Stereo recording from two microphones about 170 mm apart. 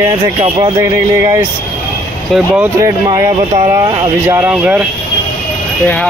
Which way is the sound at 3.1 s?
25° right (ahead or behind).